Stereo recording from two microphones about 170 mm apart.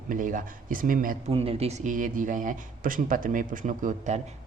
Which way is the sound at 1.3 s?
35° right (ahead or behind).